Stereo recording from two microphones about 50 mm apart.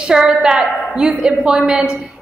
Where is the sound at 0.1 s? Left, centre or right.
Centre.